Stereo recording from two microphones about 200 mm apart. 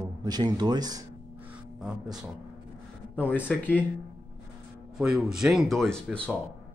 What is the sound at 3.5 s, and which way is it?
Speech, 10° left (ahead or behind).